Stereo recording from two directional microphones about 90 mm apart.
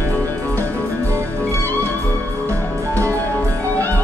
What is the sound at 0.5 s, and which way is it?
Music, 20° left (ahead or behind).